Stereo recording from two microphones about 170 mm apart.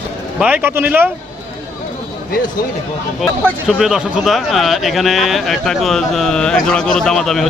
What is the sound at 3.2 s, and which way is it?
Speech, 5° right (ahead or behind).